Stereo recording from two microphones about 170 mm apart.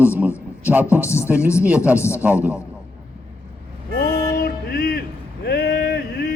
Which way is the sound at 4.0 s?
65° left (ahead or behind).